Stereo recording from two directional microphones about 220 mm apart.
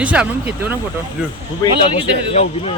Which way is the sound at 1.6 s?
20° left (ahead or behind).